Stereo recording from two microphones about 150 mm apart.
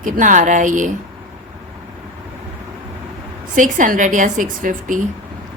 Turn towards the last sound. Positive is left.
turn(degrees=-60)  # may be behind; listen again after turning